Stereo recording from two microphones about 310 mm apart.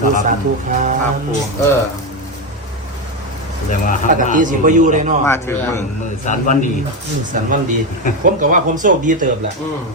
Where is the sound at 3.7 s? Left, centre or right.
Left.